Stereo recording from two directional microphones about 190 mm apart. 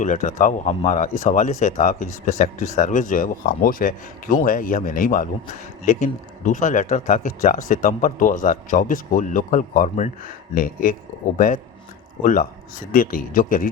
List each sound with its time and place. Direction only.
0.0 s speech: 40° left (ahead or behind)